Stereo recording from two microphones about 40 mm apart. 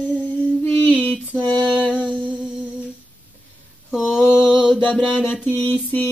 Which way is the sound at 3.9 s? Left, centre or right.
Centre.